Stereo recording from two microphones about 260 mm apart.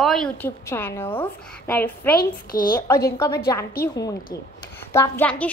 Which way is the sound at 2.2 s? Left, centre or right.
Left.